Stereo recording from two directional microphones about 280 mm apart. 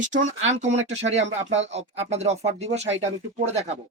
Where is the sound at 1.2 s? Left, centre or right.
Right.